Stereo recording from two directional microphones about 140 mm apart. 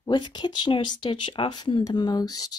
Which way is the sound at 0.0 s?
30° left (ahead or behind).